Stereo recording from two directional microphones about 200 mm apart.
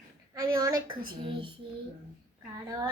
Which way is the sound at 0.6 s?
20° right (ahead or behind).